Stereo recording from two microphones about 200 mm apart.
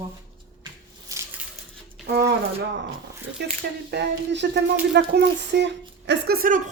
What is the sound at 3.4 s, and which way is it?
Speech, 55° right (ahead or behind).